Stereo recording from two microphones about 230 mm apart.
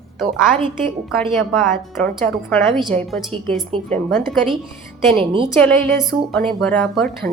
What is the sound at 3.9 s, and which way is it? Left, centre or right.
Speech, centre.